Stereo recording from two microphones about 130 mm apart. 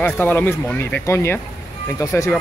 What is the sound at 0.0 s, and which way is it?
Speech, 15° left (ahead or behind).